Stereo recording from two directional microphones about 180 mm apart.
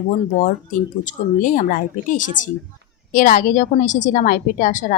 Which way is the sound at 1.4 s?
50° left (ahead or behind).